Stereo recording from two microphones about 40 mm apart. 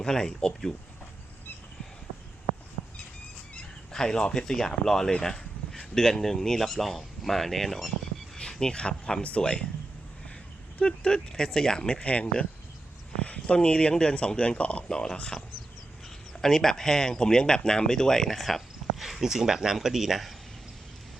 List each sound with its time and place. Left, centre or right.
0.0 s speech: centre
3.9 s speech: centre
5.2 s a sound: centre
5.9 s speech: centre
8.4 s speech: centre
10.8 s speech: left
11.9 s speech: left
13.2 s a sound: left
13.6 s speech: left
14.9 s speech: centre
18.3 s speech: centre